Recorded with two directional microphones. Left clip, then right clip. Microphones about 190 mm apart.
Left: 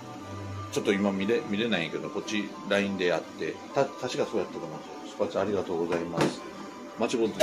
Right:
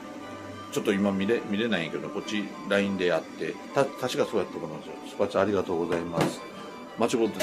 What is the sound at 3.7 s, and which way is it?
Speech, 20° right (ahead or behind).